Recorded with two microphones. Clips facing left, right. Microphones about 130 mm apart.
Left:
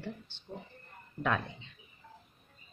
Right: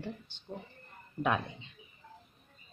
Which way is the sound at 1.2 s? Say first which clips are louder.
Right 1 dB; 20° right (ahead or behind).